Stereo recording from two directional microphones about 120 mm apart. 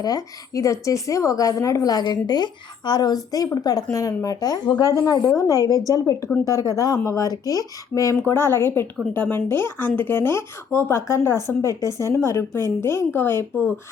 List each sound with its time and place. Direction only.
0.0 s a woman's voice: 30° left (ahead or behind)